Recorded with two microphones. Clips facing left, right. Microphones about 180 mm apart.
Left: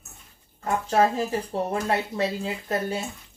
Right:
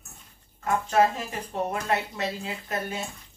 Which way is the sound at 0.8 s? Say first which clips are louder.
Left 2 dB; 35° left (ahead or behind).